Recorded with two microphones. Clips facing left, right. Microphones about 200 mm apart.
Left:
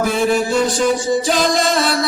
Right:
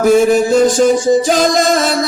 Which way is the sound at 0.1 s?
45° right (ahead or behind).